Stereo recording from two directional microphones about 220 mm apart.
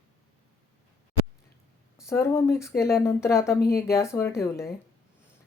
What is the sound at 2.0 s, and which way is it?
Speech, 10° left (ahead or behind).